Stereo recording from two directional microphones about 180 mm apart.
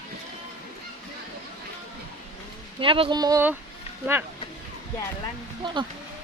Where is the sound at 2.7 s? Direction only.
30° right (ahead or behind).